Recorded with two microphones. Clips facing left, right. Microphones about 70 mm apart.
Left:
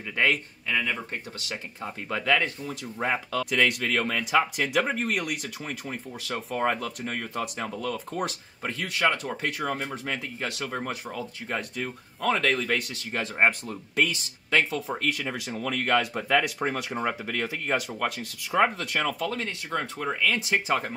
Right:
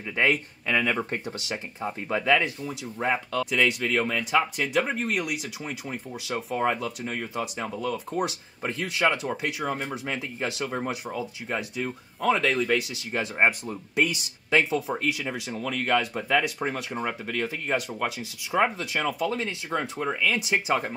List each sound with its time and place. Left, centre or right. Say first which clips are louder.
0.1 s speech: right 1 dB; centre
0.7 s speech: right 4 dB; right
1.5 s speech: right 3 dB; centre